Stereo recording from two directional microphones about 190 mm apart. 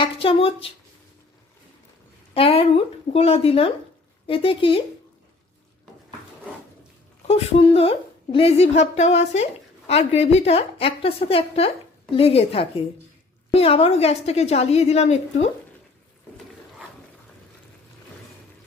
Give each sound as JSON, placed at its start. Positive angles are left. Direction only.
{"t": 0.0, "sound": "speech", "side_deg": 30}
{"t": 2.3, "sound": "speech", "side_deg": 30}
{"t": 7.3, "sound": "a woman's voice", "side_deg": 30}